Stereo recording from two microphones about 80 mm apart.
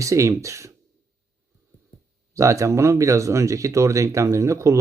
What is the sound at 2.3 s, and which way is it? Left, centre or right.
Speech, right.